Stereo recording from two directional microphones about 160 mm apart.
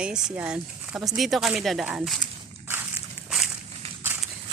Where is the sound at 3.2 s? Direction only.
Centre (ahead or behind).